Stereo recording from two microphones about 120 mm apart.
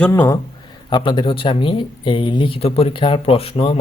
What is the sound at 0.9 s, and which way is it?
Speech, 40° left (ahead or behind).